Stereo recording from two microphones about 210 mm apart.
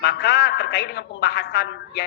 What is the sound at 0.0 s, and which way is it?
A man's voice, 55° left (ahead or behind).